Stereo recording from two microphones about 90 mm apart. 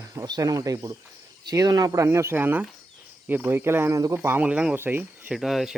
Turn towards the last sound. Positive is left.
turn(degrees=0)  # may be behind; listen again after turning